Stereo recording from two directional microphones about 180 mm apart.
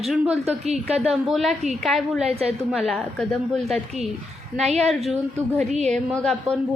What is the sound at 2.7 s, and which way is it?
A woman's voice, centre (ahead or behind).